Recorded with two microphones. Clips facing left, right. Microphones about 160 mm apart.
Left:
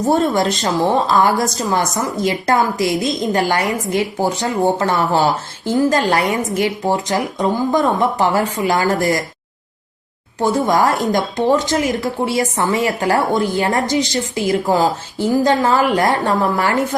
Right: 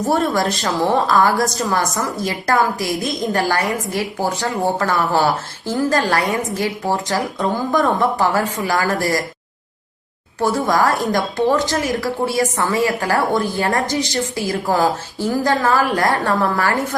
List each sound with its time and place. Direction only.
0.1 s a woman's voice: 20° left (ahead or behind)
10.4 s a woman's voice: 20° left (ahead or behind)